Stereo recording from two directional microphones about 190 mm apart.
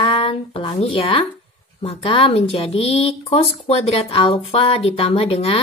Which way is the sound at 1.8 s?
30° left (ahead or behind).